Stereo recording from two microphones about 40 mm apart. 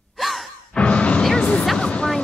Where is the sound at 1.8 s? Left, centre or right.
Left.